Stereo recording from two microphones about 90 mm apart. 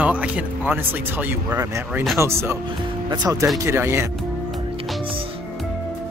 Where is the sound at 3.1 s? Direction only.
45° right (ahead or behind).